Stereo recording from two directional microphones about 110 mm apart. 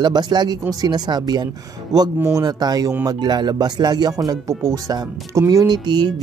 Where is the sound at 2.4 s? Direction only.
35° right (ahead or behind).